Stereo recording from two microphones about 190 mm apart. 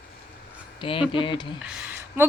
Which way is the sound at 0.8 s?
25° left (ahead or behind).